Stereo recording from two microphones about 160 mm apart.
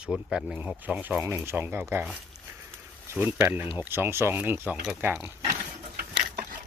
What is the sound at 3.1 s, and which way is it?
Speech, 10° right (ahead or behind).